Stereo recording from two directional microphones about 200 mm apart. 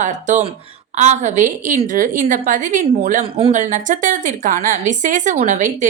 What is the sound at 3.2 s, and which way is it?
A woman's voice, 30° right (ahead or behind).